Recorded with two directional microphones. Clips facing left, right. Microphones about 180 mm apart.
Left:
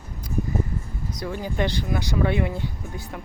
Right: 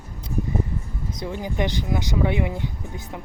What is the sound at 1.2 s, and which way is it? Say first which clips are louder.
Speech: even; 20° right (ahead or behind).